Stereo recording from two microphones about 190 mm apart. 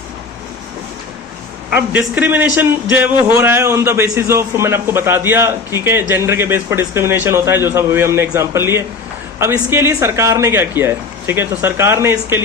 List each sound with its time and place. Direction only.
2.1 s a man's voice: 10° right (ahead or behind)